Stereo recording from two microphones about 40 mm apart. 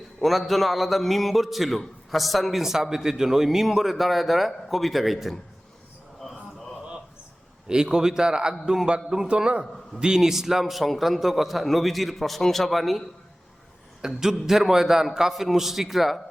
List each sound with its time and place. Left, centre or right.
0.2 s a man's voice: centre
7.9 s a man's voice: centre
10.2 s a man's voice: centre
14.2 s a man's voice: centre